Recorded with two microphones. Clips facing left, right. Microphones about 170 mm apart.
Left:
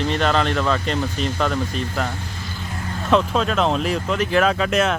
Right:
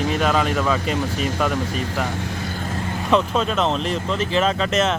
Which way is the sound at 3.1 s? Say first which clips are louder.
Left 1 dB; centre (ahead or behind).